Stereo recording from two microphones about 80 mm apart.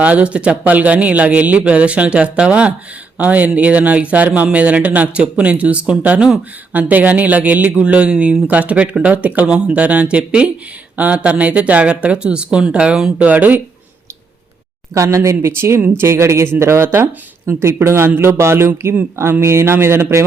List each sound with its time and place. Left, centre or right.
0.0 s speech: centre
14.9 s speech: right